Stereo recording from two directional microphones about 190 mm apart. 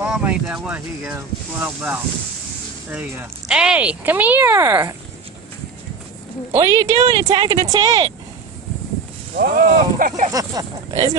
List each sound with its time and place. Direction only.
0.0 s speech: 5° right (ahead or behind)
6.5 s speech: 35° right (ahead or behind)
7.2 s speech: 20° right (ahead or behind)
9.4 s speech: 45° right (ahead or behind)
10.3 s speech: 20° right (ahead or behind)